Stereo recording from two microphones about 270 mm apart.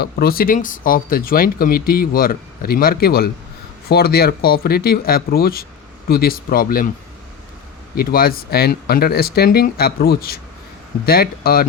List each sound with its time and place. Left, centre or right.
0.0 s speech: left
7.9 s speech: left